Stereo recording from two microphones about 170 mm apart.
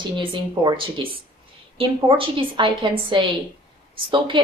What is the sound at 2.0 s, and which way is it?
A woman's voice, 30° right (ahead or behind).